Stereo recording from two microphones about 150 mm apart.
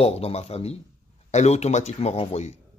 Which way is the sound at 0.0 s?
45° left (ahead or behind).